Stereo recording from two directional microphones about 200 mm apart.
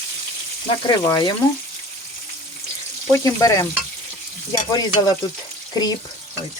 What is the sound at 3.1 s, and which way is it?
Frying, 15° left (ahead or behind).